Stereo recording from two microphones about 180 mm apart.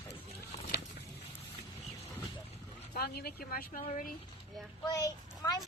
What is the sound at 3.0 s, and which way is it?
Speech, 60° left (ahead or behind).